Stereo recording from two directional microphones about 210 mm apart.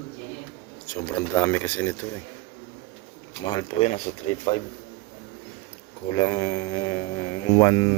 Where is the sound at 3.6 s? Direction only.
30° left (ahead or behind).